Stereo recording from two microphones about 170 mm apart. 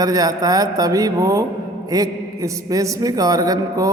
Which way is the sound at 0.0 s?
20° right (ahead or behind).